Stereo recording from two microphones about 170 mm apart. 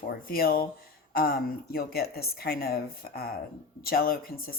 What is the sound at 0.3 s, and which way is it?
Speech, 60° left (ahead or behind).